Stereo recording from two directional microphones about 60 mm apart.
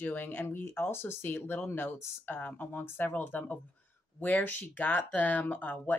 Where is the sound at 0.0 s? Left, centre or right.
Left.